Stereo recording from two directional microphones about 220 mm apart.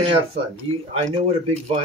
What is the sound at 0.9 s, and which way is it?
Speech, 25° right (ahead or behind).